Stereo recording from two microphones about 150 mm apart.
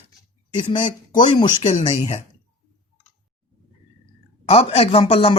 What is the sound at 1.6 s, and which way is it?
Speech, 40° left (ahead or behind).